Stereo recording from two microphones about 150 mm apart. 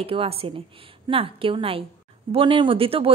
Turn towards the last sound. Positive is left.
turn(degrees=-40)  # may be behind; listen again after turning